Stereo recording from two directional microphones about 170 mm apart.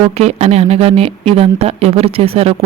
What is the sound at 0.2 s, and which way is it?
Speech, 40° right (ahead or behind).